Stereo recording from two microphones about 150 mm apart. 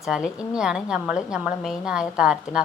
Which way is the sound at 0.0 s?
5° right (ahead or behind).